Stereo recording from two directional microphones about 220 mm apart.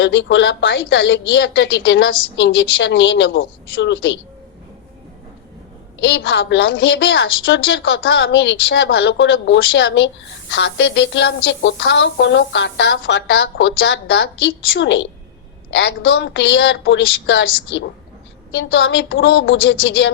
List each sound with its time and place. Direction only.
0.0 s a woman's voice: 55° left (ahead or behind)
6.0 s a woman's voice: 55° left (ahead or behind)